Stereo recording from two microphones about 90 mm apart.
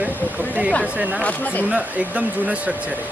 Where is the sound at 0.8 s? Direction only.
5° right (ahead or behind).